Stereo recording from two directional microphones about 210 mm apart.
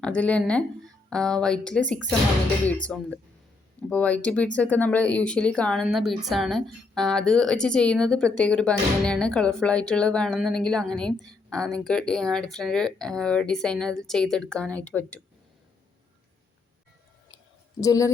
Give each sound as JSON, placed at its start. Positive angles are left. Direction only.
{"t": 0.0, "sound": "speech", "side_deg": 5}
{"t": 17.7, "sound": "speech", "side_deg": 15}